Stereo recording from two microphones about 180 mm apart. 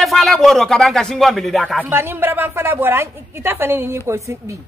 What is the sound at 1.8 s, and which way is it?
A woman's voice, 10° right (ahead or behind).